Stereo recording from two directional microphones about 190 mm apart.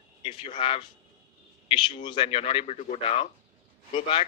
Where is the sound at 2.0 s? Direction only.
25° left (ahead or behind).